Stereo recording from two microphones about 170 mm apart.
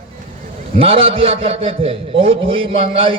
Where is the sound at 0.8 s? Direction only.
35° right (ahead or behind).